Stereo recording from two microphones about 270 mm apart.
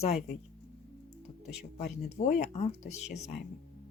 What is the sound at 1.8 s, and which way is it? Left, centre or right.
Speech, left.